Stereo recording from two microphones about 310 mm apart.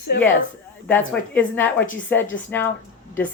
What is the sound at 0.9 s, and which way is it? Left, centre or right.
A woman's voice, centre.